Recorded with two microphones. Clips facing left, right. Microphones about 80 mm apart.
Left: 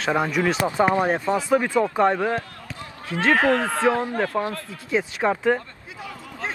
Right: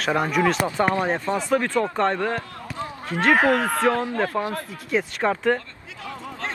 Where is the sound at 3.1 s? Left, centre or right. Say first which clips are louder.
Right 1 dB; centre.